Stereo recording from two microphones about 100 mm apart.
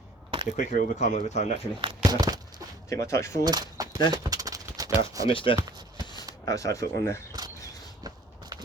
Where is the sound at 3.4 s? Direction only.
45° right (ahead or behind).